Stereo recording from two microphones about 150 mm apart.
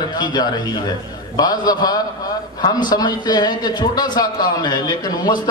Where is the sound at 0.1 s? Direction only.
30° left (ahead or behind).